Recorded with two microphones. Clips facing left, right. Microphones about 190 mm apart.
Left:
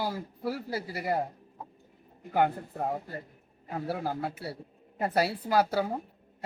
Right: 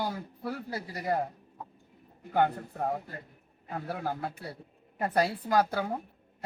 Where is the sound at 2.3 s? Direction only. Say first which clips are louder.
Even; 5° left (ahead or behind).